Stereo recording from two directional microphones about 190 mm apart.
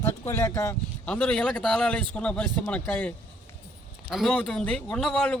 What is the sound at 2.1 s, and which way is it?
Music, 5° left (ahead or behind).